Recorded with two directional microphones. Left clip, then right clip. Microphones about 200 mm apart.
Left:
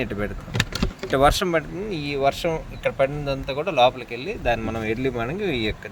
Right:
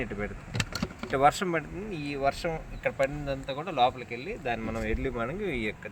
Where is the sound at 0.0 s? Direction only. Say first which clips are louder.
Left 7 dB; 45° left (ahead or behind).